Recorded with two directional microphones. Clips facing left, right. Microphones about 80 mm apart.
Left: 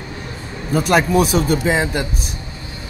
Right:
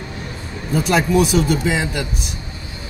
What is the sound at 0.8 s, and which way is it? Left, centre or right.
Speech, left.